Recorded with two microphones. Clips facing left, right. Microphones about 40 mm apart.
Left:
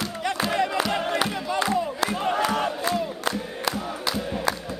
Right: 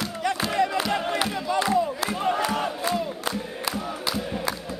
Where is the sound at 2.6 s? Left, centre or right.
Centre.